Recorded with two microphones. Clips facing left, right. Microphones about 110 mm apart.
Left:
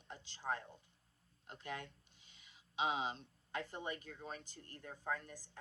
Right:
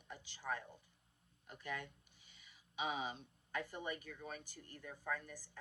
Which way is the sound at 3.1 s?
10° right (ahead or behind).